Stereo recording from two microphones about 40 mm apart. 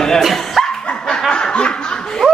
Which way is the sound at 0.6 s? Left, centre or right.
Centre.